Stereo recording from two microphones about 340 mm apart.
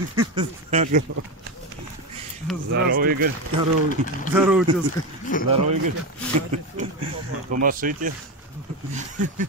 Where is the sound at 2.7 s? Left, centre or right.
Right.